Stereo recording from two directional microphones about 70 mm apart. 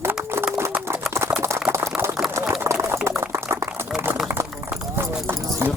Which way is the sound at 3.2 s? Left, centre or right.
Right.